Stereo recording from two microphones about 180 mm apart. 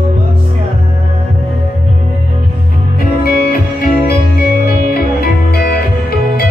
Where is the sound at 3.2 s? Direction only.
60° left (ahead or behind).